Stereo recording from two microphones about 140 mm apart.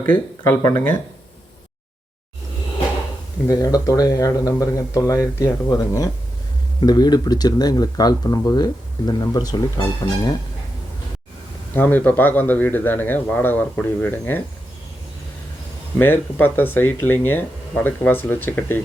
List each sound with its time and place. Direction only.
0.0 s speech: 15° left (ahead or behind)
3.4 s speech: 25° left (ahead or behind)
11.7 s speech: 15° left (ahead or behind)
16.0 s speech: 15° left (ahead or behind)